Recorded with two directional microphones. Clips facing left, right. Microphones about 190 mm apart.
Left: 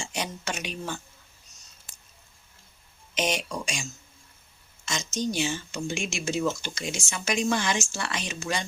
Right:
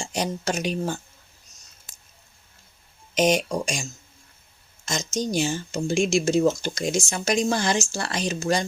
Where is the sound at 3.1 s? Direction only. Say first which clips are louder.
Right 8 dB; 40° right (ahead or behind).